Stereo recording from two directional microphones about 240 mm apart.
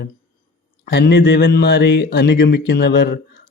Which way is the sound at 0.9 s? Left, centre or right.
Left.